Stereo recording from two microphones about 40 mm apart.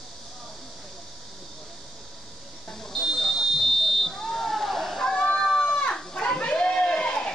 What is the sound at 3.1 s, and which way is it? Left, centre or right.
Buzzer, centre.